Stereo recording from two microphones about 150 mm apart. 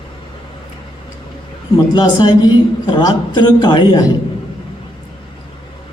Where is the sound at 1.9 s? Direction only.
30° left (ahead or behind).